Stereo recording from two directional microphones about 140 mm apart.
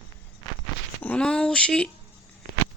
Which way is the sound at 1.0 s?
10° left (ahead or behind).